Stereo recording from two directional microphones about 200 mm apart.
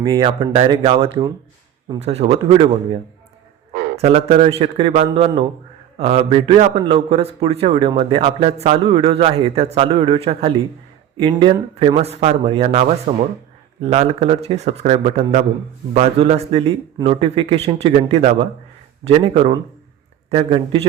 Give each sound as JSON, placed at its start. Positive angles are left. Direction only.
{"t": 0.0, "sound": "a man's voice", "side_deg": -20}